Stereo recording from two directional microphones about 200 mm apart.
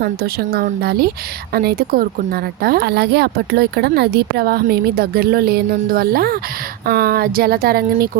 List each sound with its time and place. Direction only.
0.0 s speech: 50° right (ahead or behind)